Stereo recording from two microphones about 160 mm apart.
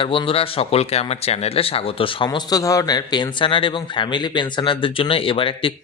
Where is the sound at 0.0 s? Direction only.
35° left (ahead or behind).